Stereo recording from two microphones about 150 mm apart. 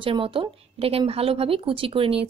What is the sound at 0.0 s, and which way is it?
A woman's voice, 35° right (ahead or behind).